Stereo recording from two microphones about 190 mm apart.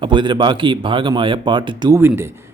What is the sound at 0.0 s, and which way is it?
Speech, 25° right (ahead or behind).